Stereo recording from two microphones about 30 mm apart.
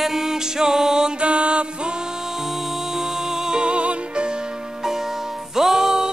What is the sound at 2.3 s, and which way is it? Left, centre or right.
Music, centre.